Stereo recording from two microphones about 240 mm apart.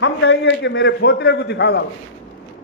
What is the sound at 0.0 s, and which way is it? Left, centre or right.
A man's voice, left.